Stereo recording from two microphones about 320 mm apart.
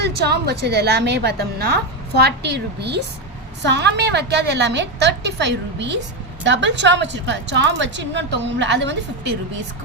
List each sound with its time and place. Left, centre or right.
0.0 s a woman's voice: right